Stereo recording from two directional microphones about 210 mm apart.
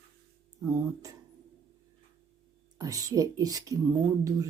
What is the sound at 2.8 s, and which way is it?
Speech, 15° right (ahead or behind).